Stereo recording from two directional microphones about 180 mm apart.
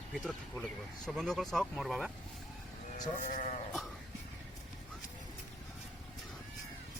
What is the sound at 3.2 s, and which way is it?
Speech, 40° left (ahead or behind).